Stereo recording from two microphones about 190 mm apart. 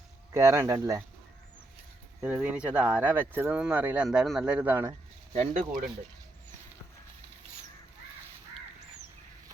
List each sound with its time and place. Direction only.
0.3 s speech: 15° right (ahead or behind)
2.2 s speech: 10° right (ahead or behind)
5.3 s speech: 35° right (ahead or behind)